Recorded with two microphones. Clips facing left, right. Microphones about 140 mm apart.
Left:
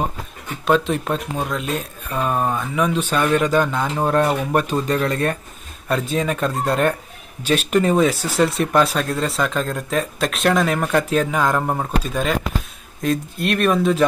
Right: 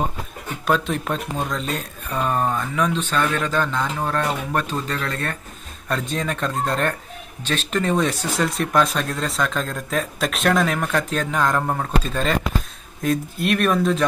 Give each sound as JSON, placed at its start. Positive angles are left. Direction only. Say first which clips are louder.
{"t": 0.7, "sound": "speech", "louder": "left 4 dB", "side_deg": 0}
{"t": 5.9, "sound": "speech", "louder": "left 4 dB", "side_deg": 5}